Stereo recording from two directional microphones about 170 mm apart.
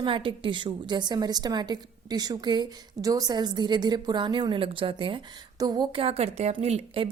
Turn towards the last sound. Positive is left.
turn(degrees=-35)  # may be behind; listen again after turning